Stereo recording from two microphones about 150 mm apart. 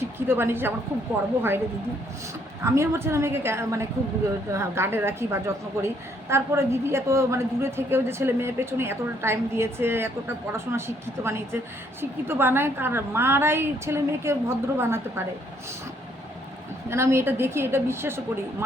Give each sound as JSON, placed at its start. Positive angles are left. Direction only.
{"t": 0.0, "sound": "a woman's voice", "side_deg": -15}
{"t": 2.6, "sound": "a woman's voice", "side_deg": -15}
{"t": 16.9, "sound": "a woman's voice", "side_deg": -15}